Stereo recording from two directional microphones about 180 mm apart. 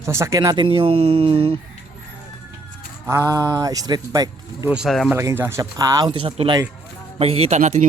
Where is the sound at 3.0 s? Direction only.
15° right (ahead or behind).